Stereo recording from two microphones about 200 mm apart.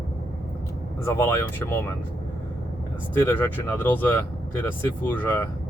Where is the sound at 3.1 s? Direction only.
10° left (ahead or behind).